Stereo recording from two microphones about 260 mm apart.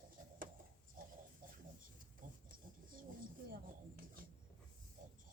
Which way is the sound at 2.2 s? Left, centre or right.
Right.